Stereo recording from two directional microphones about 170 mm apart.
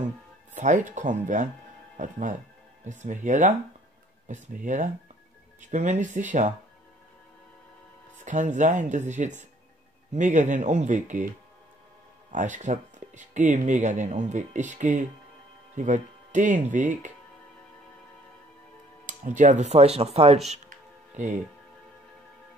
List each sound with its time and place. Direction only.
0.6 s speech: 50° right (ahead or behind)
8.2 s speech: 45° right (ahead or behind)
12.3 s speech: 50° right (ahead or behind)
19.0 s speech: 45° right (ahead or behind)